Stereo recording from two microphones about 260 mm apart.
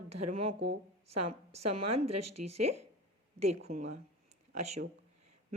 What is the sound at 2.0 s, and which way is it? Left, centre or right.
Speech, right.